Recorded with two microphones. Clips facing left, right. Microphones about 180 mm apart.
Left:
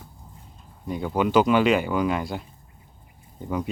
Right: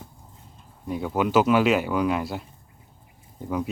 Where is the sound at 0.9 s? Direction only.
Centre (ahead or behind).